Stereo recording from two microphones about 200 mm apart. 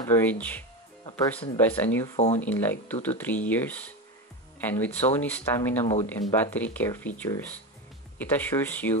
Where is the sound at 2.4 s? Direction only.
10° left (ahead or behind).